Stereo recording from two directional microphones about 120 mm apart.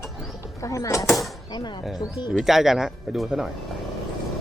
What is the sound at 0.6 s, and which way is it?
Speech, 25° left (ahead or behind).